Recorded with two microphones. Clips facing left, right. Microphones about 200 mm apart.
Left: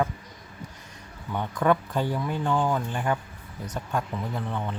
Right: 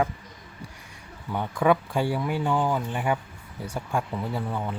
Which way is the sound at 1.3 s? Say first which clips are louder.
Right 1 dB; 10° right (ahead or behind).